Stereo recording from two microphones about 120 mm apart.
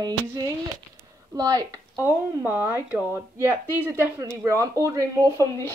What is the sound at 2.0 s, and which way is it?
Speech, 15° right (ahead or behind).